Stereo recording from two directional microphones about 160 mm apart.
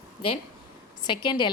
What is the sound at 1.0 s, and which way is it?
Speech, 30° left (ahead or behind).